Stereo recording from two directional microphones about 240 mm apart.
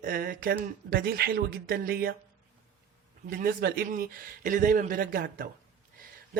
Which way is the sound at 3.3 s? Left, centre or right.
Right.